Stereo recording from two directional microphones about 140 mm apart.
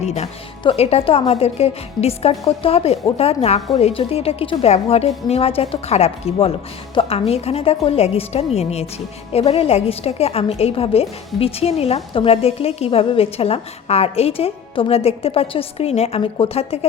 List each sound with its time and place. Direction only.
0.0 s a woman's voice: 50° left (ahead or behind)